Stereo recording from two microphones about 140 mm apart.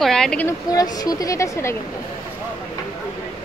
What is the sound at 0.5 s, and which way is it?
Speech, 25° left (ahead or behind).